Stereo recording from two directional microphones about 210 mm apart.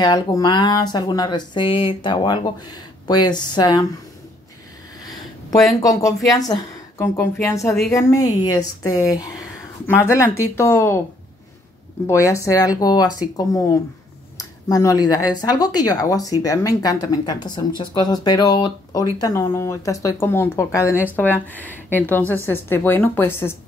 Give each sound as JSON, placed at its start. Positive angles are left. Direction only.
{"t": 0.0, "sound": "speech", "side_deg": 15}
{"t": 5.0, "sound": "a sound", "side_deg": 15}
{"t": 6.3, "sound": "speech", "side_deg": 15}
{"t": 12.1, "sound": "speech", "side_deg": 15}